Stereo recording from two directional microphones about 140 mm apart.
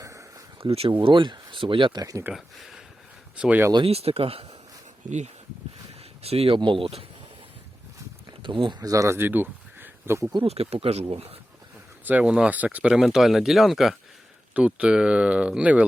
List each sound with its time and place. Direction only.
0.6 s speech: 40° right (ahead or behind); by 2.2 s 25° right (ahead or behind)
2.3 s speech: centre (ahead or behind)
3.8 s speech: 45° right (ahead or behind)
5.0 s speech: 55° right (ahead or behind)
6.2 s speech: 45° right (ahead or behind)
8.4 s speech: 35° right (ahead or behind); by 10.3 s 15° right (ahead or behind)
10.4 s speech: 45° right (ahead or behind)
12.0 s speech: 10° right (ahead or behind)